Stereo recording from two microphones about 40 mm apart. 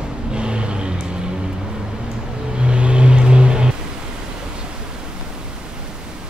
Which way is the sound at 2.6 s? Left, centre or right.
Right.